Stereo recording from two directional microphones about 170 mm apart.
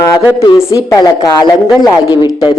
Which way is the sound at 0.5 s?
20° left (ahead or behind).